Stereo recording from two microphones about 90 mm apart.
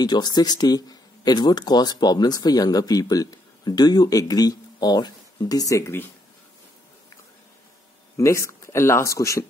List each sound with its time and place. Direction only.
0.0 s speech: 50° left (ahead or behind)
8.2 s speech: 35° left (ahead or behind)